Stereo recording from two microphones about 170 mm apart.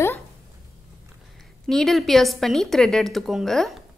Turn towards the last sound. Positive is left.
turn(degrees=0)  # may be behind; listen again after turning